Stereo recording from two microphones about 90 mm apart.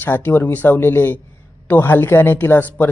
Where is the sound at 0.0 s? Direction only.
20° left (ahead or behind).